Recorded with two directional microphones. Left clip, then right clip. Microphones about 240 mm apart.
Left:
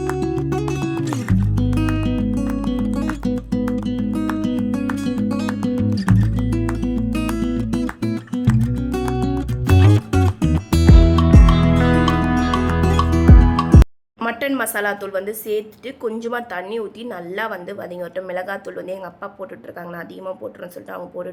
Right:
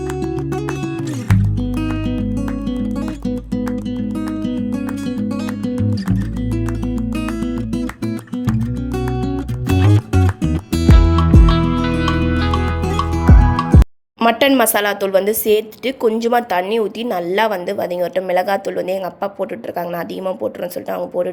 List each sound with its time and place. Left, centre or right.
0.0 s music: centre
14.2 s speech: right